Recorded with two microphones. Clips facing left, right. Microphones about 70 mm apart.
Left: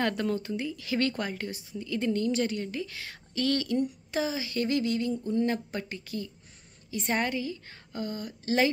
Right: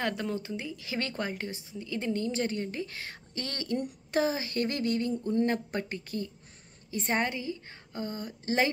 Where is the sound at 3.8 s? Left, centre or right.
Right.